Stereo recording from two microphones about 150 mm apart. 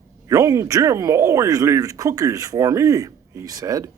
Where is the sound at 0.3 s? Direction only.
20° right (ahead or behind).